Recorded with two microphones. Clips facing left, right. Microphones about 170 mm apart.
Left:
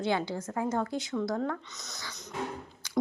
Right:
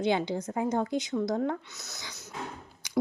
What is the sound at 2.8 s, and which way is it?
Beatboxing, 15° right (ahead or behind).